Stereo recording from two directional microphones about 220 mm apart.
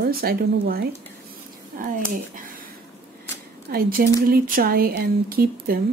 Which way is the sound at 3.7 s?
40° right (ahead or behind).